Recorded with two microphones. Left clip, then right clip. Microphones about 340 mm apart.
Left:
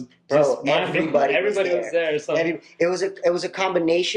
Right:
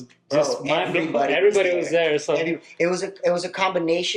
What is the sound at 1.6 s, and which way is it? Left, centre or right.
Speech, right.